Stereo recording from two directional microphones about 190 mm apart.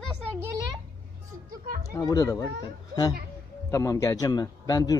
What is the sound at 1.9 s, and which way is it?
Speech, 20° left (ahead or behind).